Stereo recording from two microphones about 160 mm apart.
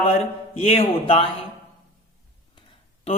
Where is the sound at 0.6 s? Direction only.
40° left (ahead or behind).